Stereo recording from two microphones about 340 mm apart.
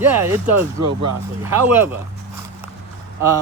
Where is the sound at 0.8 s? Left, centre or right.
Right.